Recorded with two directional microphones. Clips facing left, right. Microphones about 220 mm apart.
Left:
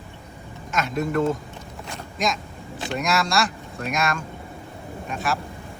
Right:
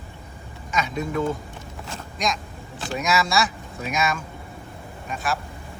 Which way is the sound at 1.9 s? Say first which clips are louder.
Left 1 dB; centre (ahead or behind).